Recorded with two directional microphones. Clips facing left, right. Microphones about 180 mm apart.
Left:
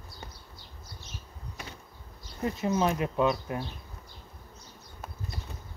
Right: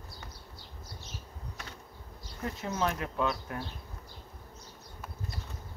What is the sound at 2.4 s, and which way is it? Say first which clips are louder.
Speech: left 5 dB; 15° left (ahead or behind).